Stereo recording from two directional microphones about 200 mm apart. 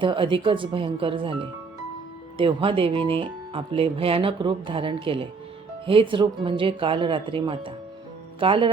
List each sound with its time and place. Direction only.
0.0 s speech: 25° right (ahead or behind)